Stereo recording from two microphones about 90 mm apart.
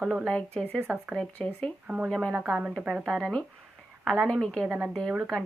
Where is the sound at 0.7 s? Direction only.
25° right (ahead or behind).